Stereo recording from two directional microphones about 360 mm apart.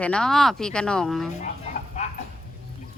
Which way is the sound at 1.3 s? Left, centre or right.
Centre.